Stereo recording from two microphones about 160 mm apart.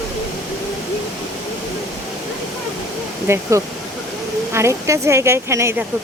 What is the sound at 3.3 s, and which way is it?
Speech, 15° right (ahead or behind).